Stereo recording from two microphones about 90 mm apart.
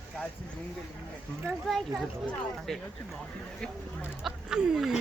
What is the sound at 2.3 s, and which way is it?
Speech, 5° left (ahead or behind).